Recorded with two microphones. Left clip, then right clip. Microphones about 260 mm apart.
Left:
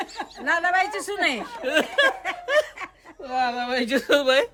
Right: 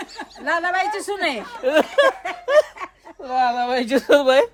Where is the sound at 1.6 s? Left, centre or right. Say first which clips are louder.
Right 5 dB; centre.